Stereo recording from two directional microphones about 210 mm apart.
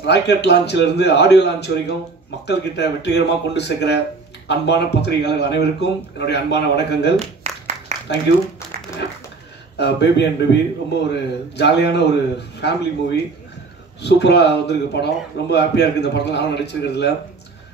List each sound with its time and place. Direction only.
0.0 s speech: 55° left (ahead or behind)
7.2 s a sound: 30° right (ahead or behind)
9.8 s speech: 55° left (ahead or behind)